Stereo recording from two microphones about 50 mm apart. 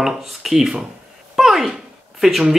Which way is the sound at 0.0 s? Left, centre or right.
Centre.